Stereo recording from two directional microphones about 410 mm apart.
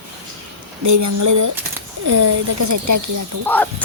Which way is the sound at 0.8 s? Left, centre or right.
Right.